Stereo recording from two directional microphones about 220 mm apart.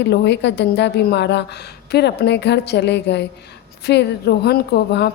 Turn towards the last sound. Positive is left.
turn(degrees=50)  # may be behind; listen again after turning